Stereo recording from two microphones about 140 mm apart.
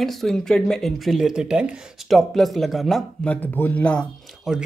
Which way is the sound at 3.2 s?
10° left (ahead or behind).